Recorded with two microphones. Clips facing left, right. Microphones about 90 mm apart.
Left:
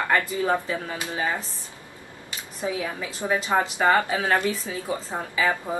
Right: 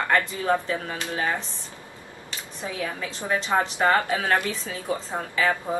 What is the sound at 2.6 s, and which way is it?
A woman's voice, 15° left (ahead or behind).